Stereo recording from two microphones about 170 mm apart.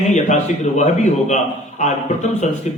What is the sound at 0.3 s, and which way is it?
A man's voice, 45° left (ahead or behind).